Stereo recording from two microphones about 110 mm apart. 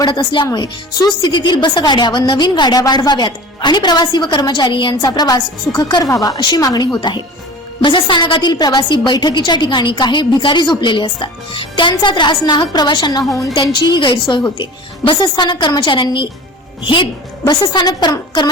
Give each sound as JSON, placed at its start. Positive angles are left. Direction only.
{"t": 0.0, "sound": "a woman's voice", "side_deg": 45}
{"t": 13.5, "sound": "a woman's voice", "side_deg": 45}